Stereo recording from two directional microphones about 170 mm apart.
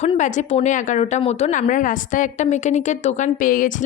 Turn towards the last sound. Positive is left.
turn(degrees=50)  # may be behind; listen again after turning